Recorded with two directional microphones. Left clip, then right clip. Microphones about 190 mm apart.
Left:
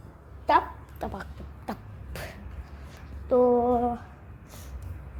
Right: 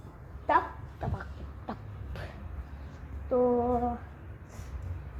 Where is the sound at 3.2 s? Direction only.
30° left (ahead or behind).